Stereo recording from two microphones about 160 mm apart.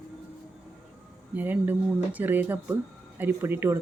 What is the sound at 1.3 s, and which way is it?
Speech, 10° right (ahead or behind).